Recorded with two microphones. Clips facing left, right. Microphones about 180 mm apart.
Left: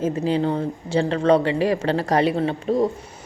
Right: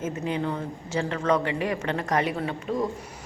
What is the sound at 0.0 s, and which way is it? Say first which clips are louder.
A woman's voice: left 7 dB; 30° left (ahead or behind).